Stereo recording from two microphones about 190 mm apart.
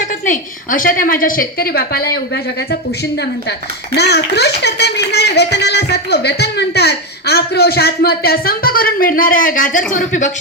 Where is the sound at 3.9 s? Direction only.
60° left (ahead or behind).